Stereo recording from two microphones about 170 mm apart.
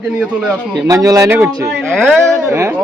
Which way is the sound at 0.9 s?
20° right (ahead or behind).